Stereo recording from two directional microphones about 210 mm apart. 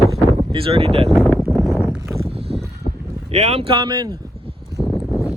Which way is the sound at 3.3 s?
30° right (ahead or behind).